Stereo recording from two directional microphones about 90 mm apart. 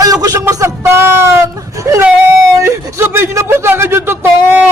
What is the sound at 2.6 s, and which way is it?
A man's voice, 30° right (ahead or behind).